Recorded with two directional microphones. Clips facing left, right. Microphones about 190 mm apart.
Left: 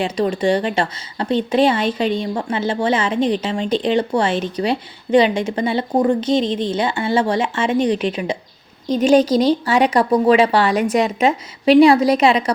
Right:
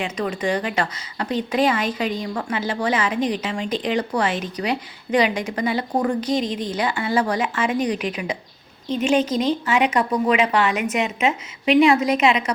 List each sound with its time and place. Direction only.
0.0 s a woman's voice: 30° left (ahead or behind)